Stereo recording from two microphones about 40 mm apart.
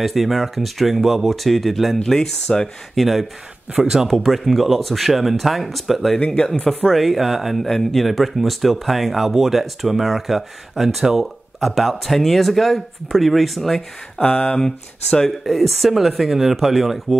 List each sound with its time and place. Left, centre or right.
0.0 s speech: centre
2.0 s speech: centre
3.0 s speech: centre
3.7 s speech: centre
6.1 s speech: left
6.4 s speech: centre
6.9 s speech: centre
14.2 s speech: left
15.4 s speech: centre